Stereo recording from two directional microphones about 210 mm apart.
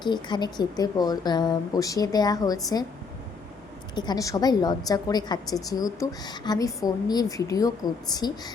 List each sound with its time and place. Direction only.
0.0 s a woman's voice: 20° left (ahead or behind)
3.9 s a woman's voice: 20° left (ahead or behind)